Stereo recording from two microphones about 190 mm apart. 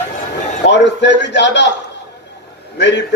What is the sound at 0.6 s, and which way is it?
A man's voice, 65° left (ahead or behind).